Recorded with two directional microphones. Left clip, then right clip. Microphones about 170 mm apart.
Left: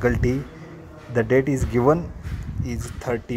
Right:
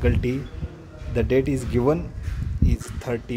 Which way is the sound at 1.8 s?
Centre (ahead or behind).